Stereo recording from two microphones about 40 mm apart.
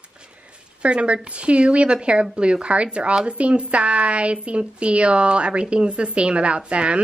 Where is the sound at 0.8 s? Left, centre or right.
Right.